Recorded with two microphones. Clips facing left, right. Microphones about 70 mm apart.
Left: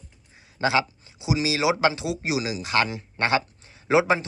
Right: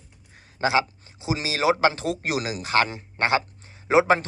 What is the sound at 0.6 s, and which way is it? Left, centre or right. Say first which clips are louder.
Speech: even; right.